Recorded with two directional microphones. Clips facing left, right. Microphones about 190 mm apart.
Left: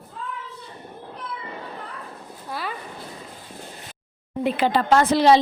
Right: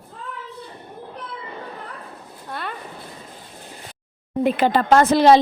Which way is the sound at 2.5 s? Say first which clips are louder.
Even; 5° left (ahead or behind).